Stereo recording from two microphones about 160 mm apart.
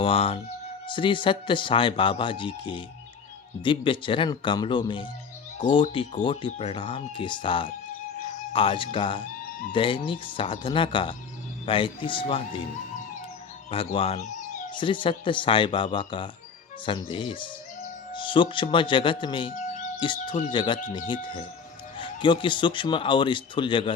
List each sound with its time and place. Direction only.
0.0 s speech: 35° left (ahead or behind)
13.7 s speech: 35° left (ahead or behind)
19.5 s music: 50° left (ahead or behind)
20.5 s speech: 30° left (ahead or behind)
21.9 s speech: 30° left (ahead or behind)